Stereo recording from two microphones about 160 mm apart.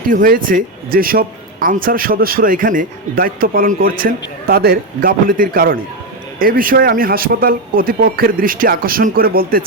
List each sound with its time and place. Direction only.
0.1 s a man's voice: 60° right (ahead or behind)